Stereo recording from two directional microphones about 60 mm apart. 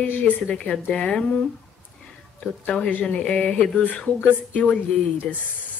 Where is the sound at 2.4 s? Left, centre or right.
Centre.